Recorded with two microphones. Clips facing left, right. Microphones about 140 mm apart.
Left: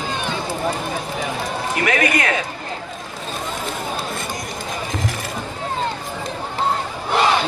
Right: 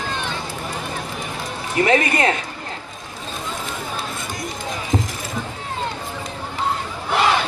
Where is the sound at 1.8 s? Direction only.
30° right (ahead or behind).